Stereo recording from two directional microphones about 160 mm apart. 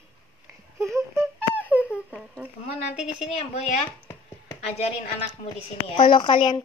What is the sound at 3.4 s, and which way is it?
Speech, 45° left (ahead or behind).